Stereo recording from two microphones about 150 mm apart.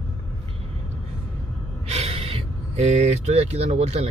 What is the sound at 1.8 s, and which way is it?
Speech, 40° right (ahead or behind).